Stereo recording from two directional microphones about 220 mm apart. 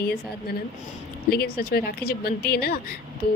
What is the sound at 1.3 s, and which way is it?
Speech, 45° left (ahead or behind).